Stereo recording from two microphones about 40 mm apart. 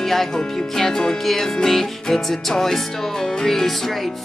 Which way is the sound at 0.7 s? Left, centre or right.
Centre.